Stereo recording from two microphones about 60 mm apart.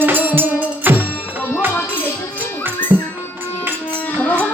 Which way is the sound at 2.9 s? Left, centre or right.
Right.